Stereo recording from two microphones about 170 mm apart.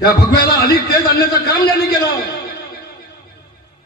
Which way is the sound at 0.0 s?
65° left (ahead or behind).